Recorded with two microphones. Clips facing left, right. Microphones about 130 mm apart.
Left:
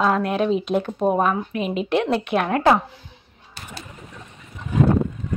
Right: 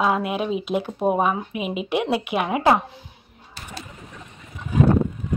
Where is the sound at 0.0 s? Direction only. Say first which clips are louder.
Left 2 dB; 5° right (ahead or behind).